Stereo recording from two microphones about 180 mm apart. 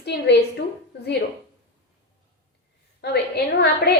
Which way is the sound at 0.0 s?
70° left (ahead or behind).